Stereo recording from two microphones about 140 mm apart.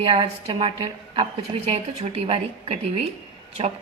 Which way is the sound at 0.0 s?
40° right (ahead or behind).